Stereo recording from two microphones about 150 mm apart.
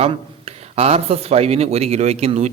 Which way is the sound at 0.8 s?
45° right (ahead or behind).